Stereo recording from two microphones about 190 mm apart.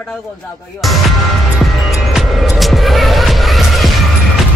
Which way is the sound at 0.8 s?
Centre (ahead or behind).